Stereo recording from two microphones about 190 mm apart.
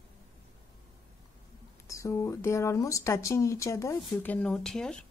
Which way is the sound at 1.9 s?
15° left (ahead or behind).